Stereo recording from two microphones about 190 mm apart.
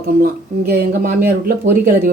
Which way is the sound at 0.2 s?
55° right (ahead or behind).